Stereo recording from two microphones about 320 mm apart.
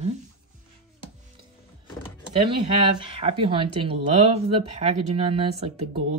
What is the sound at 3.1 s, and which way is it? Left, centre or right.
Speech, centre.